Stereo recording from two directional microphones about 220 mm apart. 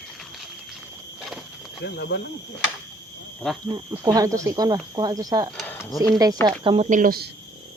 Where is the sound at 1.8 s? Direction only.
50° left (ahead or behind).